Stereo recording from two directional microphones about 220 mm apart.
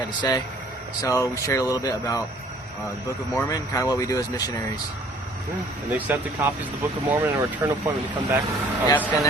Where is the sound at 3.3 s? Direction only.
15° left (ahead or behind).